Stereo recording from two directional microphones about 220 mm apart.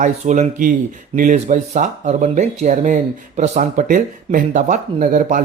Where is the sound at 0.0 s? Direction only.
35° right (ahead or behind).